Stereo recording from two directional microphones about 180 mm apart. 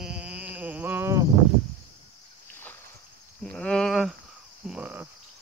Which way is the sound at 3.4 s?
5° left (ahead or behind).